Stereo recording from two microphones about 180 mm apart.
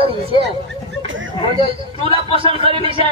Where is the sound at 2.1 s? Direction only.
30° right (ahead or behind).